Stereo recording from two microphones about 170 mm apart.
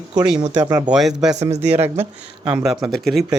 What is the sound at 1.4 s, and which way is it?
Speech, 40° right (ahead or behind).